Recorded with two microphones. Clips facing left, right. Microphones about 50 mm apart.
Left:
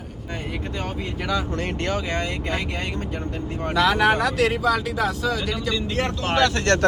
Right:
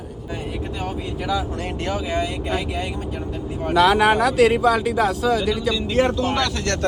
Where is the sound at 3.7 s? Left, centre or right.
Centre.